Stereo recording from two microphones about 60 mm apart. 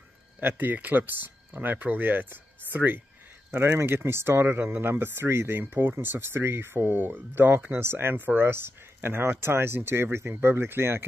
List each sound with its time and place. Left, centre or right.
0.4 s speech: right